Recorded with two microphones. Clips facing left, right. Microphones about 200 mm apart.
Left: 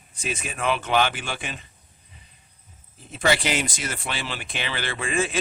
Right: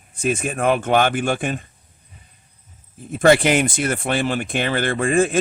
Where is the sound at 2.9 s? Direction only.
50° right (ahead or behind).